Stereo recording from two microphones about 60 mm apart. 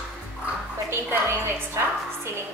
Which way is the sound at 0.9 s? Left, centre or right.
Right.